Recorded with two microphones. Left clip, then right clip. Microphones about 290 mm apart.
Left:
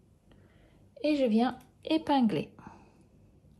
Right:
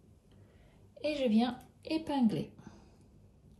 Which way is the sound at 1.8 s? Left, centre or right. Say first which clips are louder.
Left 6 dB; left.